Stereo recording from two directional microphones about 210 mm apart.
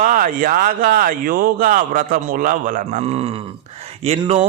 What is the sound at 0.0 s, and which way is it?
A man's voice, 40° right (ahead or behind).